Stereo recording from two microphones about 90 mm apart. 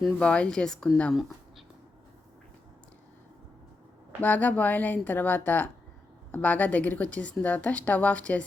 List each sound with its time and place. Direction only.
0.2 s a woman's voice: 10° left (ahead or behind)
4.2 s a woman's voice: 20° left (ahead or behind)